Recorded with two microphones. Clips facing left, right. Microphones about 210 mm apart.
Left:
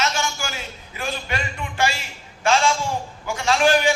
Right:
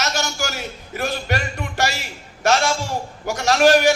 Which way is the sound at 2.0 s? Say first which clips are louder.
Right 5 dB; 70° right (ahead or behind).